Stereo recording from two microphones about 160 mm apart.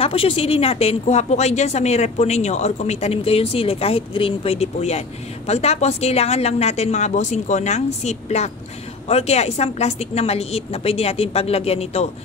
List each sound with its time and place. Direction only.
0.0 s a woman's voice: 35° left (ahead or behind)